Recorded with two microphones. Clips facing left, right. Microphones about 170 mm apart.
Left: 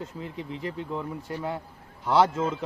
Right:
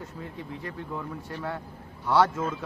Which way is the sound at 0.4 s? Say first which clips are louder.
Left 4 dB; 90° left.